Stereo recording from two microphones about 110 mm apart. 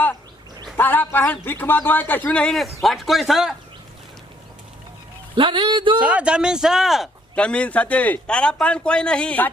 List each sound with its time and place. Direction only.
0.8 s speech: 15° left (ahead or behind); by 3.5 s centre (ahead or behind)
5.3 s a man's voice: 50° right (ahead or behind)
6.0 s speech: 10° right (ahead or behind)
7.3 s speech: 10° left (ahead or behind)